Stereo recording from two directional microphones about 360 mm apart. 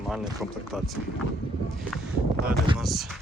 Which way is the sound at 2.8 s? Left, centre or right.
Centre.